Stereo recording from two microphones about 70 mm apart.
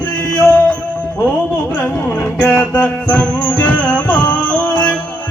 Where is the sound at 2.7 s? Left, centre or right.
Left.